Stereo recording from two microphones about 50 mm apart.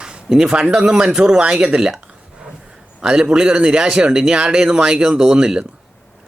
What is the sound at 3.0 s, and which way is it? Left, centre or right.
Speech, centre.